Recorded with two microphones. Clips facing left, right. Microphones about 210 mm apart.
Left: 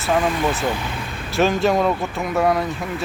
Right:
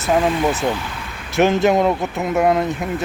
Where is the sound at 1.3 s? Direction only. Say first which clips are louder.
Right 3 dB; 20° right (ahead or behind).